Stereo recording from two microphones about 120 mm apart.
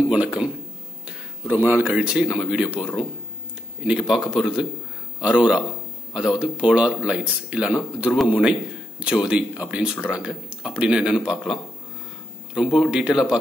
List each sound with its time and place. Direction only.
0.1 s speech: 10° right (ahead or behind)
1.5 s speech: 15° right (ahead or behind)
3.8 s speech: 5° right (ahead or behind)